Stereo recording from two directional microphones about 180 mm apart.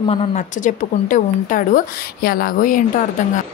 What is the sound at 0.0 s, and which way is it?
Speech, 30° left (ahead or behind).